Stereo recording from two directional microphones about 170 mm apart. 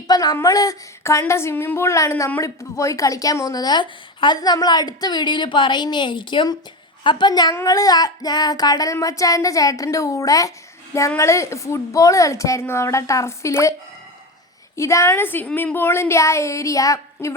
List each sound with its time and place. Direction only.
0.1 s a woman's voice: 20° left (ahead or behind)
14.8 s speech: 15° left (ahead or behind)